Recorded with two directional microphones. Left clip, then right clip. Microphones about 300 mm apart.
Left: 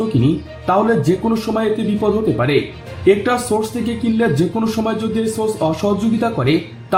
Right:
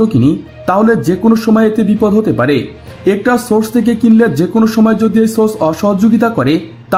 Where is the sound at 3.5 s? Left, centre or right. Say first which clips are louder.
Right 7 dB; right.